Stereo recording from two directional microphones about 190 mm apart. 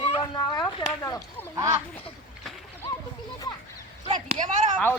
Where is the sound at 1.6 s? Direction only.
15° right (ahead or behind).